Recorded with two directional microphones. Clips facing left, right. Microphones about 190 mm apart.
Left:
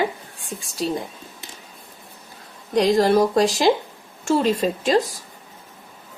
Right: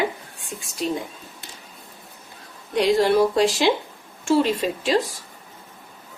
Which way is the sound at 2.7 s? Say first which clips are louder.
Left 1 dB; 40° left (ahead or behind).